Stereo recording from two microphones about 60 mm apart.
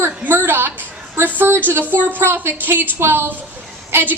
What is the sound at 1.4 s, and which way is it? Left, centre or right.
A woman's voice, right.